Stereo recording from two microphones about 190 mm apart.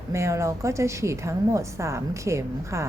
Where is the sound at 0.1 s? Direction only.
15° right (ahead or behind).